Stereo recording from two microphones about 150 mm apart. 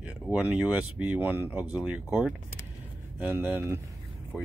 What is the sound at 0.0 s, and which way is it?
Speech, 5° right (ahead or behind).